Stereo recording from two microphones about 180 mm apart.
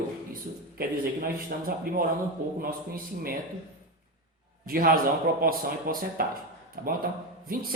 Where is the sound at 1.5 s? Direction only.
50° right (ahead or behind).